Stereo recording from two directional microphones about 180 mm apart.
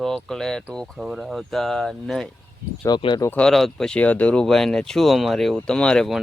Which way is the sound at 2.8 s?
25° left (ahead or behind).